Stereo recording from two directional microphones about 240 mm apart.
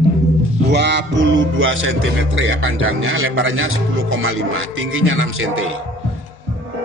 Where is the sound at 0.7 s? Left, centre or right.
Right.